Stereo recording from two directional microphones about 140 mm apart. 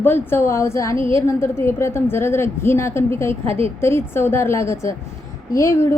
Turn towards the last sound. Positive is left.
turn(degrees=20)  # may be behind; listen again after turning